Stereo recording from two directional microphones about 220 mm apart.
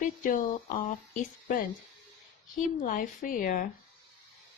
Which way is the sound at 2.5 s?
35° left (ahead or behind).